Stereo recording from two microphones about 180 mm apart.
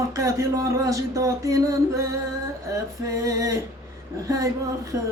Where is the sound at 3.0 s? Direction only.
20° right (ahead or behind).